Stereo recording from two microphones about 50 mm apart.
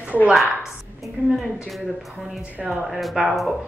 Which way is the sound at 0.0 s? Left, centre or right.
Right.